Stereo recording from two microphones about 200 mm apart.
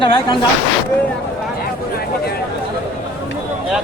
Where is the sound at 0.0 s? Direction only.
25° left (ahead or behind).